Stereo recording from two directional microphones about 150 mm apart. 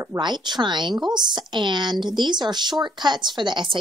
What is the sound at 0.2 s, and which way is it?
A woman's voice, 30° right (ahead or behind).